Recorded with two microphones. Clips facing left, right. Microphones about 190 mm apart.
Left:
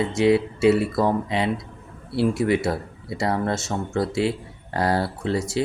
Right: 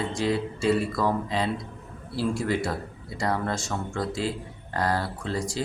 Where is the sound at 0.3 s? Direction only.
70° left (ahead or behind).